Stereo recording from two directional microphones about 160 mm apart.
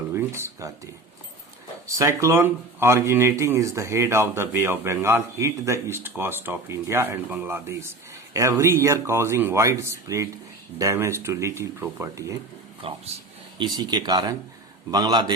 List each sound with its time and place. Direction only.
0.1 s a sound: 15° right (ahead or behind)
1.9 s speech: 20° right (ahead or behind)
12.8 s speech: 35° right (ahead or behind)